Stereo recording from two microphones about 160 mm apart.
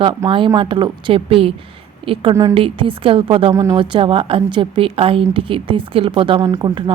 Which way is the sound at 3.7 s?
30° right (ahead or behind).